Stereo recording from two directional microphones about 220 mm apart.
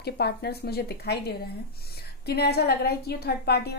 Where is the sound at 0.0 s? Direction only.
45° left (ahead or behind).